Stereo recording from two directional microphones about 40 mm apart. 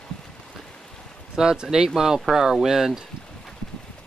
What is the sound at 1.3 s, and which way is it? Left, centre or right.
Speech, centre.